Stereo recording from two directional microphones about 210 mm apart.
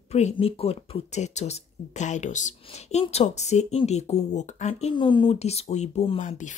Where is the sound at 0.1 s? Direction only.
30° left (ahead or behind).